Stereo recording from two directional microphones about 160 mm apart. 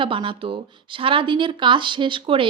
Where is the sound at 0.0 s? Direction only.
30° right (ahead or behind).